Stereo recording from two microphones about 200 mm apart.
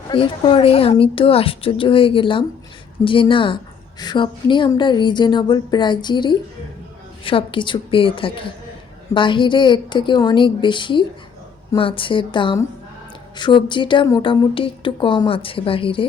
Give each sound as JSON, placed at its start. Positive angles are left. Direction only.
{"t": 0.1, "sound": "speech", "side_deg": 25}